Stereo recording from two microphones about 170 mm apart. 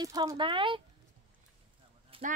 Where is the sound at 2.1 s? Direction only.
30° right (ahead or behind).